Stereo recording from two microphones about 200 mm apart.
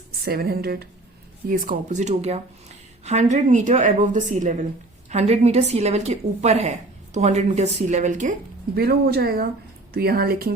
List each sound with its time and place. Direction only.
0.3 s a woman's voice: 50° right (ahead or behind)